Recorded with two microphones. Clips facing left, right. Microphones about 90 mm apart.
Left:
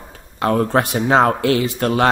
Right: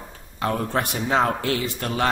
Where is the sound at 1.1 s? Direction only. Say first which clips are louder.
Left 6 dB; 50° left (ahead or behind).